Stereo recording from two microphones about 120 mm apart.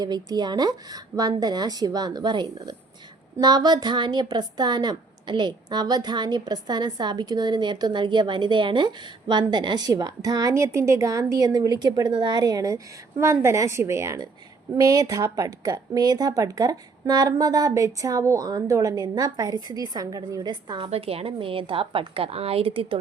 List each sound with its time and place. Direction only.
0.0 s speech: 35° right (ahead or behind)
20.9 s a woman's voice: 55° right (ahead or behind)